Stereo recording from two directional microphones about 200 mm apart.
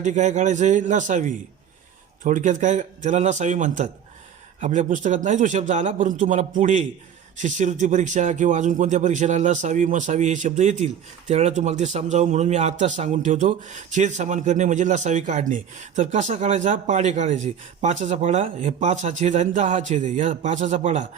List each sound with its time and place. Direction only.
0.0 s a man's voice: 35° right (ahead or behind)